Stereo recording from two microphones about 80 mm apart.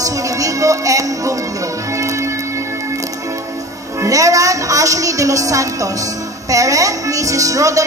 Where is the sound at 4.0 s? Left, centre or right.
Right.